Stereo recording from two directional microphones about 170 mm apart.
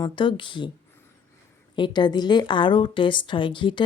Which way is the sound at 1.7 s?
25° left (ahead or behind).